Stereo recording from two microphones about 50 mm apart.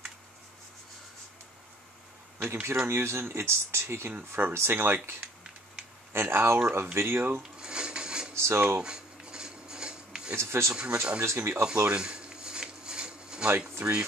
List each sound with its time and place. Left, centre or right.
2.4 s speech: right
6.1 s speech: right
7.5 s a sound: centre
8.4 s speech: right
8.8 s dishes: centre
10.3 s speech: right
10.7 s speech: centre
11.3 s speech: right
11.9 s a sound: centre
13.8 s speech: right